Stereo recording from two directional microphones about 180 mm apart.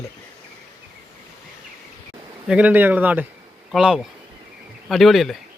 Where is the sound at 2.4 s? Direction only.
5° right (ahead or behind).